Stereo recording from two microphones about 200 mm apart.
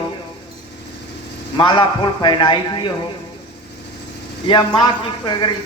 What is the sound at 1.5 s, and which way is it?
A man's voice, 25° left (ahead or behind).